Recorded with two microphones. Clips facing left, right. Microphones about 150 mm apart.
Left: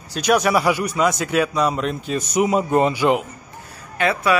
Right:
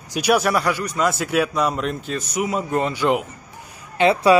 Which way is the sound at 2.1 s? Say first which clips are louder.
Left 7 dB; 20° left (ahead or behind).